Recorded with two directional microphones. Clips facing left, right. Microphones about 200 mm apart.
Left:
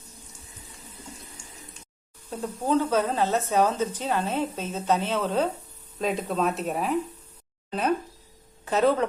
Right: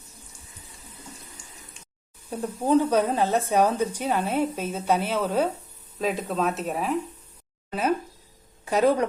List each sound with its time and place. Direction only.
2.3 s a woman's voice: 10° right (ahead or behind)